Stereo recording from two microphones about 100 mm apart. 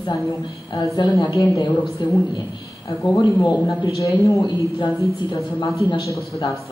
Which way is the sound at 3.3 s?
40° left (ahead or behind).